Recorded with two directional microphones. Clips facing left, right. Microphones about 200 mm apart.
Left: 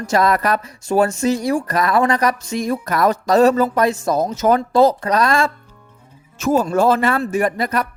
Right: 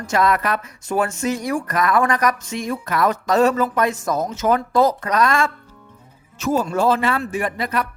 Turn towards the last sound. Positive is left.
turn(degrees=40)  # may be behind; listen again after turning